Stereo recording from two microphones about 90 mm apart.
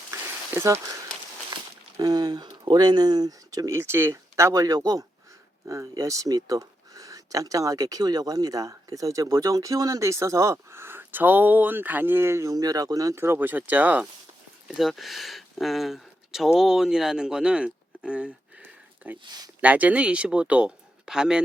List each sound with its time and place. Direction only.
0.1 s a sound: 30° right (ahead or behind)
2.0 s speech: 45° right (ahead or behind); by 14.1 s 20° right (ahead or behind)
14.8 s speech: centre (ahead or behind)
19.2 s speech: 50° right (ahead or behind)
19.6 s speech: 15° right (ahead or behind)